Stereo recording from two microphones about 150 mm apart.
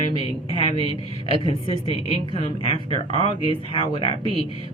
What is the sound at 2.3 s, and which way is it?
Speech, 35° left (ahead or behind).